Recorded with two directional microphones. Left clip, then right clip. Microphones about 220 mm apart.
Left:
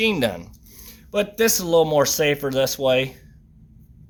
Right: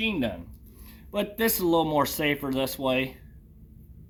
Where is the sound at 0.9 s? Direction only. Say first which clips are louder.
Left 7 dB; 35° left (ahead or behind).